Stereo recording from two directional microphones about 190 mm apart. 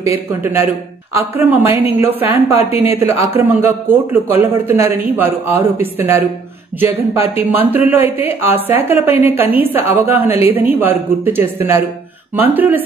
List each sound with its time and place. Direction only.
0.0 s a man's voice: 15° right (ahead or behind)
2.5 s a woman's voice: 30° left (ahead or behind)
3.0 s a man's voice: 15° right (ahead or behind)